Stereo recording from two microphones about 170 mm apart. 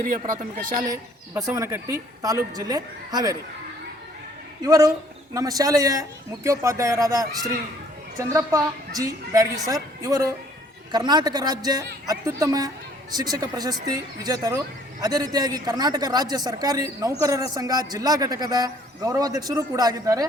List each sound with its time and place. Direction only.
0.0 s speech: 55° right (ahead or behind)
1.3 s a man's voice: 15° right (ahead or behind)
4.6 s a man's voice: 20° right (ahead or behind)